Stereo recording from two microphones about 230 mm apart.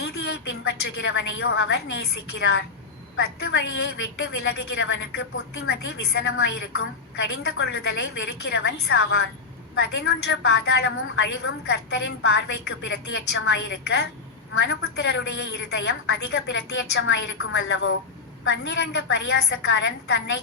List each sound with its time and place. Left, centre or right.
0.0 s a woman's voice: left